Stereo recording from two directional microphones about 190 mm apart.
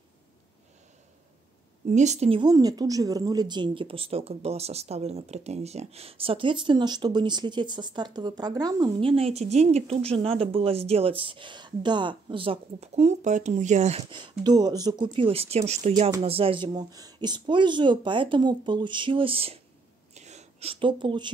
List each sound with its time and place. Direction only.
1.9 s a woman's voice: 40° right (ahead or behind)
16.6 s a woman's voice: 20° right (ahead or behind)
20.2 s a sound: 35° right (ahead or behind)